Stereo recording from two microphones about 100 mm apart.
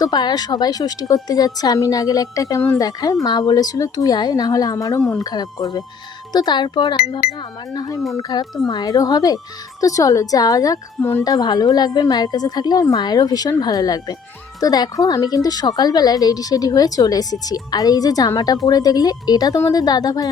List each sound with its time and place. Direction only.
0.0 s a woman's voice: 45° left (ahead or behind); by 5.2 s 25° left (ahead or behind)
5.2 s a woman's voice: 40° left (ahead or behind)
7.7 s a woman's voice: 40° left (ahead or behind)